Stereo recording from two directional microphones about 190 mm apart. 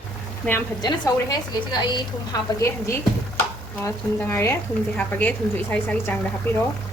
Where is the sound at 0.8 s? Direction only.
20° left (ahead or behind).